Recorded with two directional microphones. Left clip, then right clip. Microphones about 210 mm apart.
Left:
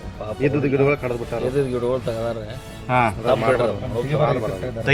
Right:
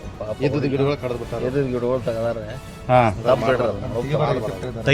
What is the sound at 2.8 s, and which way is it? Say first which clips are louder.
Speech: right 3 dB; 55° right (ahead or behind).